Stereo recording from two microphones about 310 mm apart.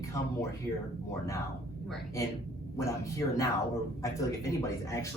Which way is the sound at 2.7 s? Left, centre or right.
Centre.